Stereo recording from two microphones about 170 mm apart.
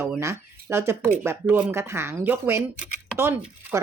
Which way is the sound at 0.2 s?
15° right (ahead or behind).